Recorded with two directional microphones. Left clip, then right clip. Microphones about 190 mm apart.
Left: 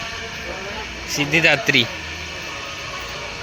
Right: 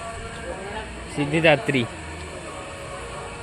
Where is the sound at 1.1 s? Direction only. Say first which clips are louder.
Left 2 dB; 15° right (ahead or behind).